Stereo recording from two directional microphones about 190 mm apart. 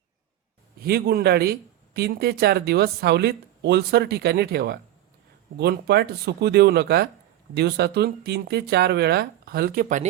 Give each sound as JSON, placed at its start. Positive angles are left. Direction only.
{"t": 0.8, "sound": "speech", "side_deg": -55}